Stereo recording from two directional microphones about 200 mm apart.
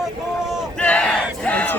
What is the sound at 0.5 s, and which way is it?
Battle cry, 5° left (ahead or behind).